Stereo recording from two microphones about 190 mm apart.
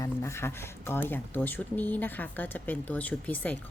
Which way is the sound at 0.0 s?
15° left (ahead or behind).